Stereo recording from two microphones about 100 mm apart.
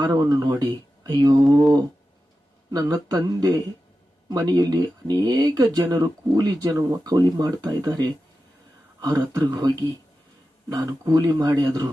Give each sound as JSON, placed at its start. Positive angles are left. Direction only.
{"t": 0.0, "sound": "speech", "side_deg": -40}
{"t": 2.7, "sound": "speech", "side_deg": -40}